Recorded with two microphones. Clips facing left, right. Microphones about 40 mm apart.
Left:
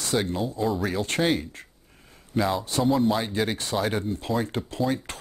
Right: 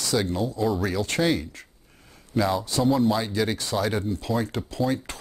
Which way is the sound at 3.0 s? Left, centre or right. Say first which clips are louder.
Right 1 dB; left.